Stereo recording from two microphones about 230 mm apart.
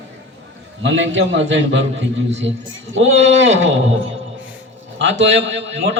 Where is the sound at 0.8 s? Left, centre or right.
Right.